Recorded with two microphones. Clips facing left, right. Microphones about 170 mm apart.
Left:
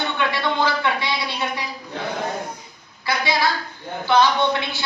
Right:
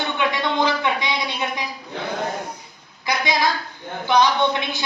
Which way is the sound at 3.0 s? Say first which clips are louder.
Even; 15° right (ahead or behind).